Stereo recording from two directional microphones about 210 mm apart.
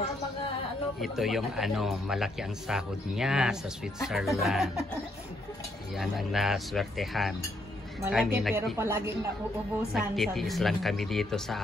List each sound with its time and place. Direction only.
1.0 s speech: centre (ahead or behind)
5.9 s speech: centre (ahead or behind)
8.7 s speech: 10° right (ahead or behind)
9.9 s speech: centre (ahead or behind)